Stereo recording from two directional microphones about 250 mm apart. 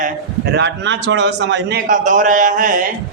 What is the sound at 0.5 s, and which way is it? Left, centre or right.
A man's voice, right.